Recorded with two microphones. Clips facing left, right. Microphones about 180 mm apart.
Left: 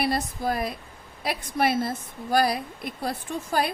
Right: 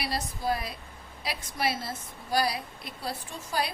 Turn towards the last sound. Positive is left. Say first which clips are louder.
# left 6 dB
turn(degrees=55)  # may be behind; listen again after turning